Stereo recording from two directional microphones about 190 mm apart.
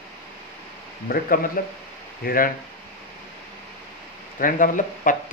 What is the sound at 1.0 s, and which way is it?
Speech, 50° left (ahead or behind).